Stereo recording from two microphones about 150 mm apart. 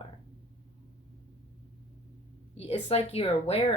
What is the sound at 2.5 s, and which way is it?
Speech, 40° left (ahead or behind).